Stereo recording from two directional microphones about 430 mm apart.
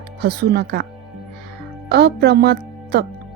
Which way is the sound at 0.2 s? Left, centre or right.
Right.